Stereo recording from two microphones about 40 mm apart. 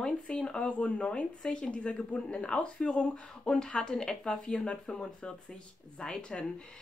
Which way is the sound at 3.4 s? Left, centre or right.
Centre.